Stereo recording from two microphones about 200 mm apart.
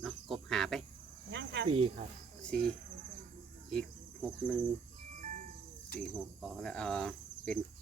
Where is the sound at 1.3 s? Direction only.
60° right (ahead or behind).